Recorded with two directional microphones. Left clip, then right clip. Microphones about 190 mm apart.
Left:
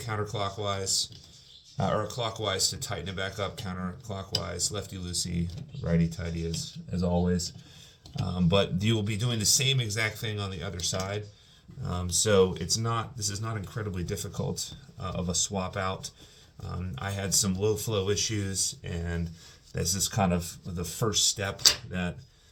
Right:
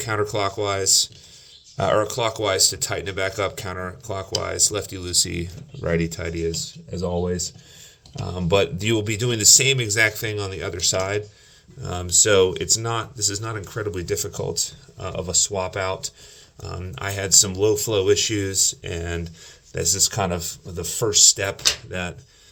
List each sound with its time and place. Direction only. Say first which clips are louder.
0.0 s speech: right 9 dB; 50° right (ahead or behind)
8.4 s speech: right 7 dB; 45° right (ahead or behind)
11.8 s speech: right 9 dB; 30° right (ahead or behind)